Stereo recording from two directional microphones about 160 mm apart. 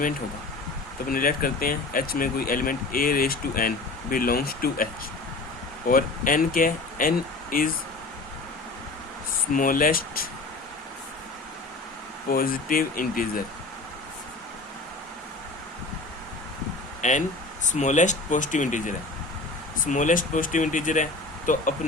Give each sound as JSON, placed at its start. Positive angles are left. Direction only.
{"t": 1.0, "sound": "speech", "side_deg": 60}
{"t": 5.9, "sound": "speech", "side_deg": 60}
{"t": 9.5, "sound": "speech", "side_deg": 60}
{"t": 12.3, "sound": "speech", "side_deg": 65}
{"t": 17.0, "sound": "speech", "side_deg": 50}